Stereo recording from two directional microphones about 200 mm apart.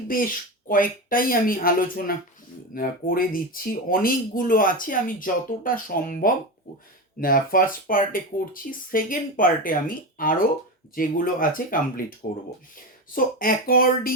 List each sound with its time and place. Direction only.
0.1 s speech: 45° left (ahead or behind)